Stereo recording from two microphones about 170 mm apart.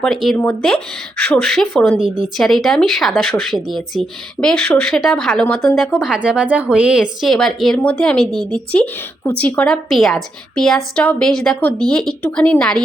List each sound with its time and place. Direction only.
0.0 s speech: centre (ahead or behind)